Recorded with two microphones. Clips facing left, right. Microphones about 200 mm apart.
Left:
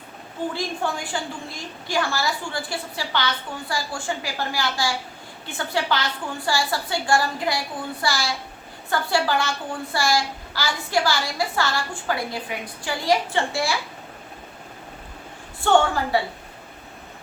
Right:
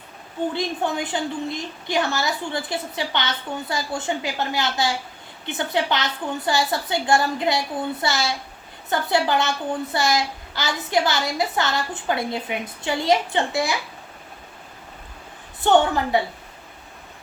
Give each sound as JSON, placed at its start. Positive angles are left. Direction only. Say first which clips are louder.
{"t": 0.5, "sound": "a child's voice", "louder": "right 2 dB", "side_deg": -20}
{"t": 15.6, "sound": "a child's voice", "louder": "right 1 dB", "side_deg": -20}